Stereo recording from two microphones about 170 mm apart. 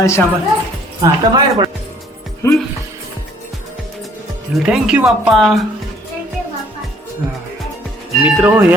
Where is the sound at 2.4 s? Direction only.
15° left (ahead or behind).